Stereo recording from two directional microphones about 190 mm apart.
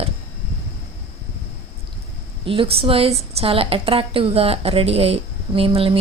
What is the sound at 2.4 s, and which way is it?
A woman's voice, 30° right (ahead or behind).